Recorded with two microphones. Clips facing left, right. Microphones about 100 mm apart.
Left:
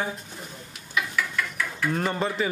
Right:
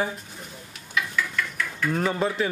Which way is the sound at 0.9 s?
5° left (ahead or behind).